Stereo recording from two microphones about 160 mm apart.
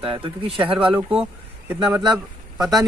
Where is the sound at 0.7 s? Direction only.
10° right (ahead or behind).